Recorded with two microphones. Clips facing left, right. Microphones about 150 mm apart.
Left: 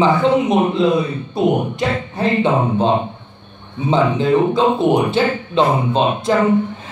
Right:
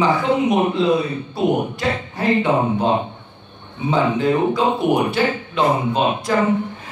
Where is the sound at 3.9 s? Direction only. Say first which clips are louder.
Left 2 dB; 25° left (ahead or behind).